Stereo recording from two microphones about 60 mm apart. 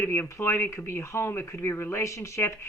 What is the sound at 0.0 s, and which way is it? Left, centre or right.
Speech, left.